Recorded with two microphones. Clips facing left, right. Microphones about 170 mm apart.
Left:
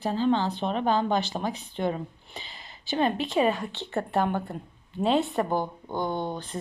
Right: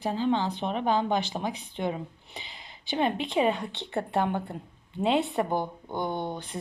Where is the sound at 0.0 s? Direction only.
15° right (ahead or behind).